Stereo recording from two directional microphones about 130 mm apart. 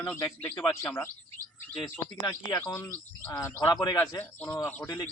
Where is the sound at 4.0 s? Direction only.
15° left (ahead or behind).